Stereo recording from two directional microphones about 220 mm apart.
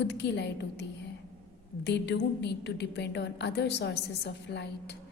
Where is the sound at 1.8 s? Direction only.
50° left (ahead or behind).